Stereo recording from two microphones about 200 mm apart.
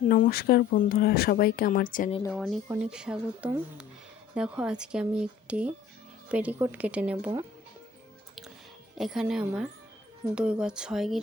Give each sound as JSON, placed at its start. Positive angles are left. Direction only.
{"t": 0.1, "sound": "speech", "side_deg": 45}
{"t": 2.3, "sound": "a woman's voice", "side_deg": 0}
{"t": 9.0, "sound": "speech", "side_deg": 0}